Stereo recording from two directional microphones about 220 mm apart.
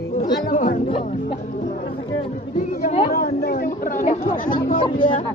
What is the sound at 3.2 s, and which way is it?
A woman's voice, 45° left (ahead or behind).